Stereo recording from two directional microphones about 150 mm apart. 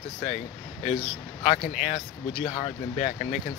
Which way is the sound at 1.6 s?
50° left (ahead or behind).